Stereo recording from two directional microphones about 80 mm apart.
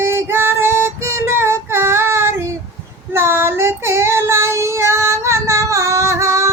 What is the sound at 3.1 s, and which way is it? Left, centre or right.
Child singing, right.